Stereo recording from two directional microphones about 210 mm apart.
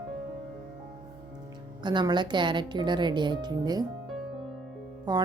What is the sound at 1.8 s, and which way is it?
Speech, 20° right (ahead or behind).